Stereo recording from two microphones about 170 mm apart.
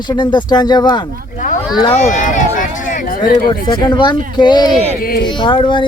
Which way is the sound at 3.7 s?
25° left (ahead or behind).